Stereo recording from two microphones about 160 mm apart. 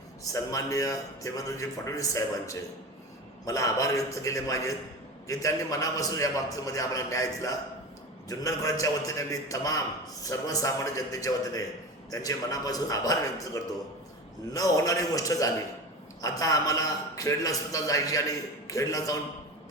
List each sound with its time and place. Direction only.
0.3 s a man's voice: 20° left (ahead or behind)